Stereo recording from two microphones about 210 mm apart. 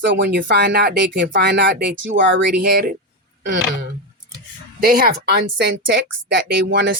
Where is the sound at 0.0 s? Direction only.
55° right (ahead or behind).